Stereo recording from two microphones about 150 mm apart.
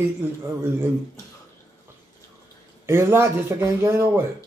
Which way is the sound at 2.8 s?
15° right (ahead or behind).